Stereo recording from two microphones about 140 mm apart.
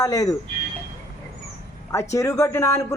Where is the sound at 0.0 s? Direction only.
25° left (ahead or behind).